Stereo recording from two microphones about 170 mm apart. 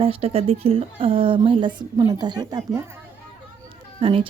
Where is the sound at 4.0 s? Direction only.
35° right (ahead or behind).